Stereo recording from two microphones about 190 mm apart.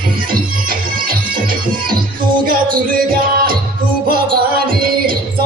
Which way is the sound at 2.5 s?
50° right (ahead or behind).